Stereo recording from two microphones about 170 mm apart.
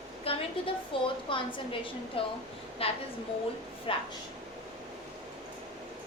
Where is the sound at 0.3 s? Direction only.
30° left (ahead or behind).